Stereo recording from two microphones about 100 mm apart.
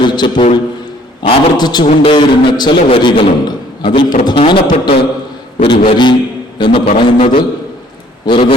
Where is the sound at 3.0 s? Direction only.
50° left (ahead or behind).